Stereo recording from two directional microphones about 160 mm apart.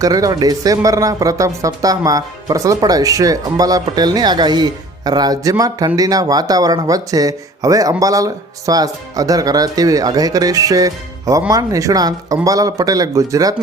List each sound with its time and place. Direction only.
0.0 s speech: 20° right (ahead or behind)